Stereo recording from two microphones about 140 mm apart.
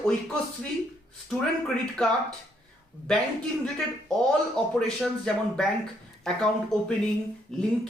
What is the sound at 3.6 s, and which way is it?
Speech, centre (ahead or behind).